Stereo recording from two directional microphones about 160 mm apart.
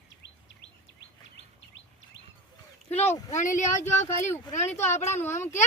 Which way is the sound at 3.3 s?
50° left (ahead or behind).